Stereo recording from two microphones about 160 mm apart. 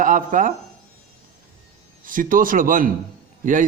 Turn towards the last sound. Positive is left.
turn(degrees=-55)  # may be behind; listen again after turning